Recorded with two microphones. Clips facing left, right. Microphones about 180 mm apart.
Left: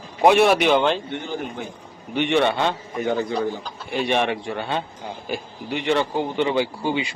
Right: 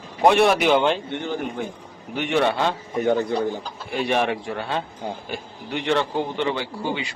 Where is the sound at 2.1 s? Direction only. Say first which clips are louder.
Left 1 dB; centre (ahead or behind).